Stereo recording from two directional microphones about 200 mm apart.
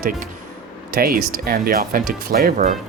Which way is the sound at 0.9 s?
50° right (ahead or behind).